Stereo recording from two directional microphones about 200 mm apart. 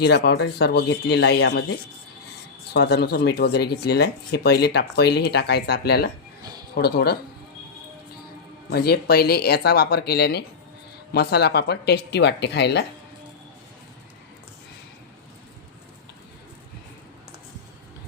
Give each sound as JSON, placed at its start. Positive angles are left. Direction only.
{"t": 0.0, "sound": "speech", "side_deg": 55}
{"t": 2.7, "sound": "speech", "side_deg": 55}
{"t": 8.7, "sound": "speech", "side_deg": 50}